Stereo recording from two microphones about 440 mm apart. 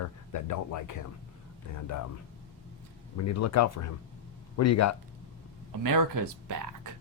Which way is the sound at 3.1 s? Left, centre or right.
Left.